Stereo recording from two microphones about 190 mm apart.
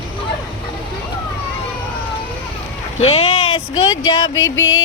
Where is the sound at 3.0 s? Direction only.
30° left (ahead or behind).